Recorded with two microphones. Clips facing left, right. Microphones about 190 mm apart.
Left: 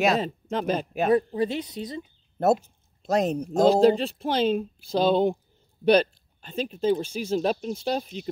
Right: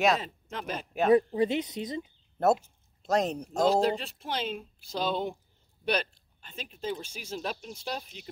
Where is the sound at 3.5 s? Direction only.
30° left (ahead or behind).